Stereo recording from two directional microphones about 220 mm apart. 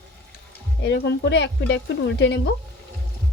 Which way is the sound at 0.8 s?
50° left (ahead or behind).